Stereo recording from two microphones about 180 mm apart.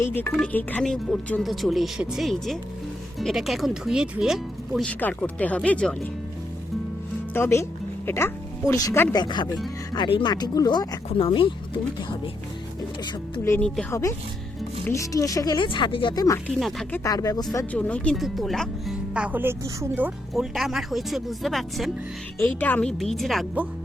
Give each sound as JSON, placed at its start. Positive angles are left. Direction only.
{"t": 0.0, "sound": "speech", "side_deg": 10}
{"t": 7.3, "sound": "speech", "side_deg": 15}
{"t": 9.1, "sound": "speech", "side_deg": 25}
{"t": 11.1, "sound": "speech", "side_deg": 35}
{"t": 13.4, "sound": "speech", "side_deg": 15}
{"t": 16.5, "sound": "speech", "side_deg": 0}
{"t": 16.9, "sound": "speech", "side_deg": 20}